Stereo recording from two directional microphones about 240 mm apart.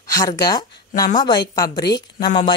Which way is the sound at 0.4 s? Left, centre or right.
Centre.